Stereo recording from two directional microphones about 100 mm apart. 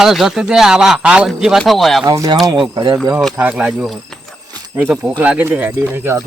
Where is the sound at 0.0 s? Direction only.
5° right (ahead or behind).